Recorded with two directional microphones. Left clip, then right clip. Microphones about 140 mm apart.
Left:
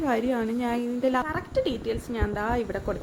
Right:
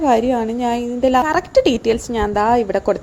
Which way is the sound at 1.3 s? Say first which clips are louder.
Right 13 dB; 50° right (ahead or behind).